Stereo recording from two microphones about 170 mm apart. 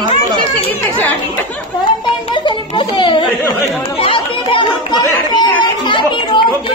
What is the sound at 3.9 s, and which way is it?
Chatter, 30° left (ahead or behind).